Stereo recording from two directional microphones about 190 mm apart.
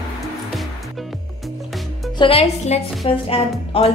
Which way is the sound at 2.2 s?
30° left (ahead or behind).